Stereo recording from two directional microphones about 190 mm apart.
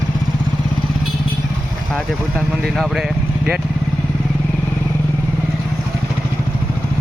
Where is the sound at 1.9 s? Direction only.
Centre (ahead or behind).